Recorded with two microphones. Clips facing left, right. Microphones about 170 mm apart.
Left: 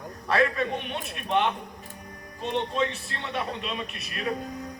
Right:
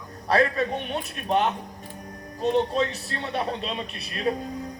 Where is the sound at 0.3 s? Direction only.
35° right (ahead or behind).